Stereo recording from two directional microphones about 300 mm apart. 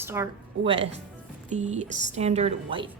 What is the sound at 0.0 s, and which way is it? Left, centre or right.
A woman's voice, centre.